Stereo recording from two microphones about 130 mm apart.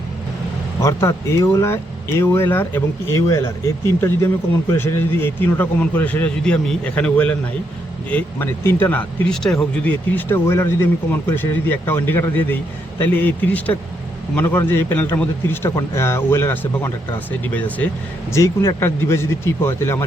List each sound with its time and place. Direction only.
0.8 s speech: 20° left (ahead or behind)
4.8 s speech: 20° left (ahead or behind)